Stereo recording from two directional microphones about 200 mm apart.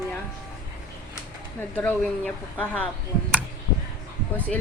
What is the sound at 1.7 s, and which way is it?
A woman's voice, 5° left (ahead or behind).